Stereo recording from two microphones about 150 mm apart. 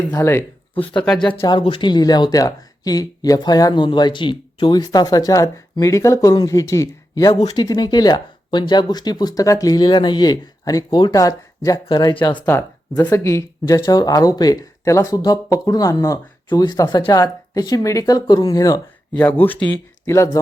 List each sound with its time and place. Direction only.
0.1 s speech: 20° left (ahead or behind)
0.9 s speech: 5° left (ahead or behind)
1.5 s speech: 35° left (ahead or behind)
12.5 s speech: 15° left (ahead or behind)